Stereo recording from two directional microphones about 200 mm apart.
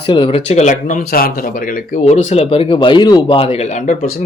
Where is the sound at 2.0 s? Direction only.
30° left (ahead or behind).